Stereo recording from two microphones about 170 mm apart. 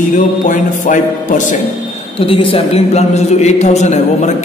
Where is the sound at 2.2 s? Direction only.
30° left (ahead or behind).